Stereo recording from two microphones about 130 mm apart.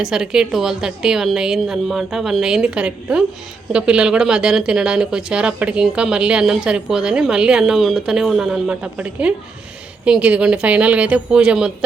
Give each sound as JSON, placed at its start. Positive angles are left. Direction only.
{"t": 0.0, "sound": "a woman's voice", "side_deg": -5}